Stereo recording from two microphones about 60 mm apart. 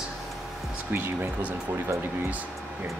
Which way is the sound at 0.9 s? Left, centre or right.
Right.